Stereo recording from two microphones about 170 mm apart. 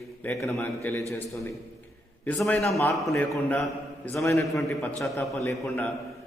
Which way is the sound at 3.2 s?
5° left (ahead or behind).